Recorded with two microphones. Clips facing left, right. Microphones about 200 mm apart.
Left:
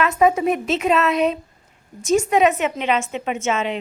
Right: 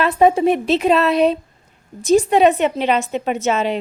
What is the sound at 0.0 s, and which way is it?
A woman's voice, 30° right (ahead or behind).